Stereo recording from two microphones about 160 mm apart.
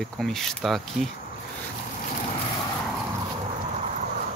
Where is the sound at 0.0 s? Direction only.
Centre (ahead or behind).